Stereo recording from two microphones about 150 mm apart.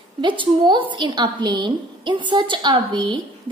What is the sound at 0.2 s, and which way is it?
A woman's voice, 30° right (ahead or behind).